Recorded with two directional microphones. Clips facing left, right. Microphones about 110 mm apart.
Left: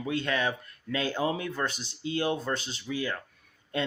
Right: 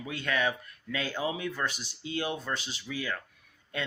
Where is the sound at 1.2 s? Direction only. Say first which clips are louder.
Left 2 dB; 40° left (ahead or behind).